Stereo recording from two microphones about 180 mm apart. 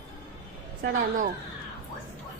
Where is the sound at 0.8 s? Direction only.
50° right (ahead or behind).